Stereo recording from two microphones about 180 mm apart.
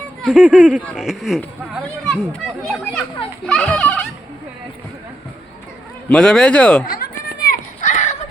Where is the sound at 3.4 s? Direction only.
5° left (ahead or behind).